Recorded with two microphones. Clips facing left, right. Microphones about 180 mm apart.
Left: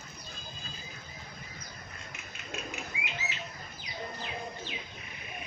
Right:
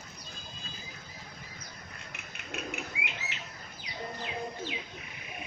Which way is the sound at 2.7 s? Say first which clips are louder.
Right 1 dB; 65° right (ahead or behind).